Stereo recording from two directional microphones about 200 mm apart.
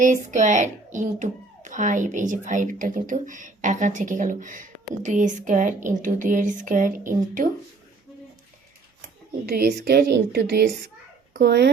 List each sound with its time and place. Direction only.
0.0 s a child's voice: 40° right (ahead or behind)
9.5 s a woman's voice: 50° right (ahead or behind)